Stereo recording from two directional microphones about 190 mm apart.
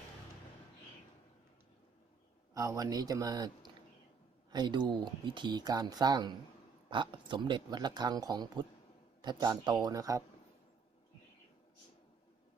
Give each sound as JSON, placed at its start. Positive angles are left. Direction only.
{"t": 2.6, "sound": "speech", "side_deg": -15}
{"t": 4.5, "sound": "speech", "side_deg": -25}